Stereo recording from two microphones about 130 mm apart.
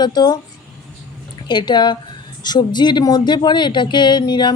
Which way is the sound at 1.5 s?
35° left (ahead or behind).